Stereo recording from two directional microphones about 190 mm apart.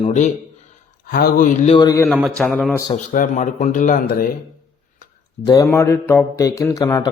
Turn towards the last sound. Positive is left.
turn(degrees=15)  # may be behind; listen again after turning